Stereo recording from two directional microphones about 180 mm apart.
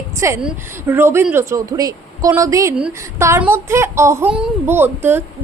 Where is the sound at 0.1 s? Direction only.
15° right (ahead or behind).